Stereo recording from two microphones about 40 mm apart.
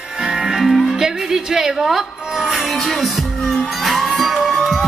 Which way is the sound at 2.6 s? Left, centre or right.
Centre.